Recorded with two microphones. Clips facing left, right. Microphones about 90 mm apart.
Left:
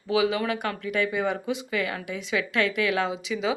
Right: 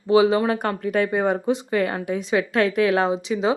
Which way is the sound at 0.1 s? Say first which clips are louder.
Right 7 dB; 35° right (ahead or behind).